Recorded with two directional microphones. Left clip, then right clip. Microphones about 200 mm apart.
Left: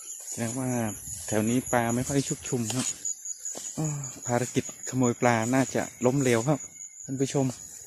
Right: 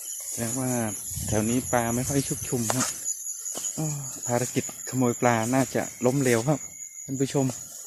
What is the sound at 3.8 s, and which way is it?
Speech, 25° left (ahead or behind).